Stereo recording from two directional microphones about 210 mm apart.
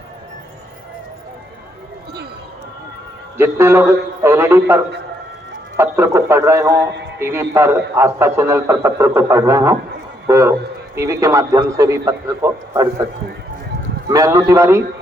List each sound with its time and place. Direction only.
3.3 s a man's voice: 10° right (ahead or behind)
6.7 s speech: 55° right (ahead or behind)
7.2 s a man's voice: 10° right (ahead or behind)
14.1 s a man's voice: 15° right (ahead or behind)